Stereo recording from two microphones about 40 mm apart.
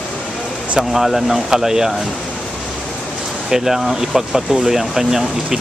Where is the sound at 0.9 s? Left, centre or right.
Centre.